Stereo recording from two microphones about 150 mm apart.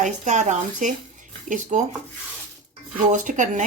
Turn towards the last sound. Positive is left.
turn(degrees=-60)  # may be behind; listen again after turning